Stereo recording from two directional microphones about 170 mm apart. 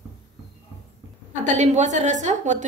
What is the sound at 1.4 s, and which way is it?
A woman's voice, 45° right (ahead or behind).